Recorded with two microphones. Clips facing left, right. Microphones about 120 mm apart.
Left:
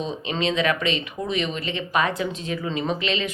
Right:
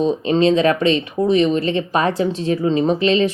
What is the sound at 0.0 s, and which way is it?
Speech, 40° right (ahead or behind).